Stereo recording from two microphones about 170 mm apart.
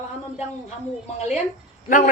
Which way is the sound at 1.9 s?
50° left (ahead or behind).